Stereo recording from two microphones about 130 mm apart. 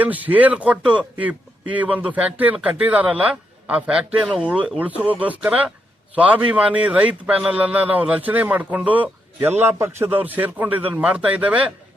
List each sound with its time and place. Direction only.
0.0 s a man's voice: 10° right (ahead or behind)